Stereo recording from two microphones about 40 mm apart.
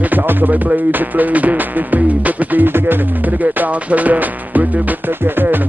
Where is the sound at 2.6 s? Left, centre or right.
Right.